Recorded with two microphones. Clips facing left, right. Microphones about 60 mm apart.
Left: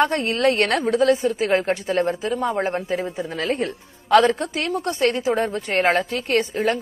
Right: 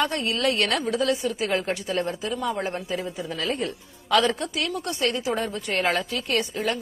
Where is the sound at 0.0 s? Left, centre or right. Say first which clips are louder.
Left 5 dB; left.